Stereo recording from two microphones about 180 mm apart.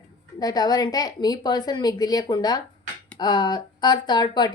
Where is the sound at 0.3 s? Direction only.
20° left (ahead or behind).